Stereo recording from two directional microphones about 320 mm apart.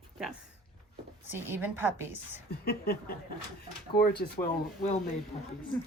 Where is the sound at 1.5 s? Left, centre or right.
Centre.